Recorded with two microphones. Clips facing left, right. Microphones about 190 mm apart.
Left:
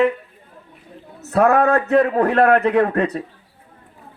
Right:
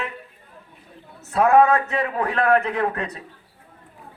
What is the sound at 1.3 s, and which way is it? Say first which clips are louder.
A man's voice: left 1 dB; 60° left (ahead or behind).